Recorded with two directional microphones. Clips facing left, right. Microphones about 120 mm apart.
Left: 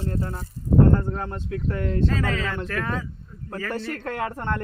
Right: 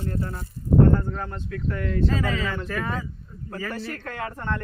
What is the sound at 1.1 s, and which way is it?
Speech, 25° left (ahead or behind).